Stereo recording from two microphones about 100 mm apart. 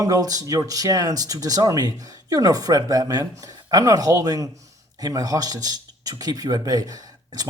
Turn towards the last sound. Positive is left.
turn(degrees=-40)  # may be behind; listen again after turning